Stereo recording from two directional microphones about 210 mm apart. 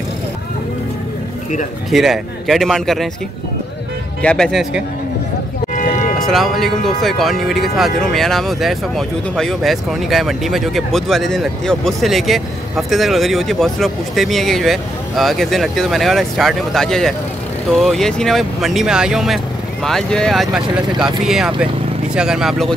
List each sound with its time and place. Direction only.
1.9 s speech: centre (ahead or behind)
4.2 s speech: 5° left (ahead or behind)
5.8 s music: 35° left (ahead or behind)
6.1 s speech: centre (ahead or behind)